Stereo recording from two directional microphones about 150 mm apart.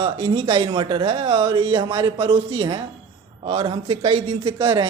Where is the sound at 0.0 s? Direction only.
35° right (ahead or behind).